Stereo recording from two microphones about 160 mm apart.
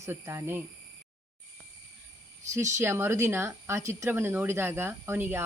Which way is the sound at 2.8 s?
15° right (ahead or behind).